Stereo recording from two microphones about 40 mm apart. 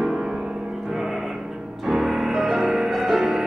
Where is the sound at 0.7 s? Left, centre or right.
Centre.